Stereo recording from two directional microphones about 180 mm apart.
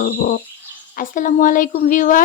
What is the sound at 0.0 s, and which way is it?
Speech, 50° left (ahead or behind).